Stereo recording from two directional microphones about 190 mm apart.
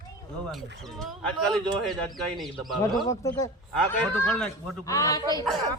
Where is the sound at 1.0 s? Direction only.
Centre (ahead or behind).